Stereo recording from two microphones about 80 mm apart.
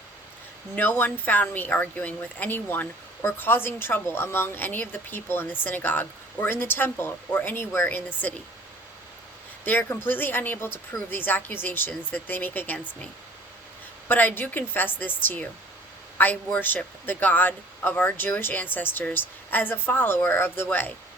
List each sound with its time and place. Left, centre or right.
0.8 s speech: left
9.6 s speech: left
14.1 s speech: left